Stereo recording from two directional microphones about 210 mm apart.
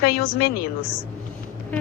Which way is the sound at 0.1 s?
45° left (ahead or behind).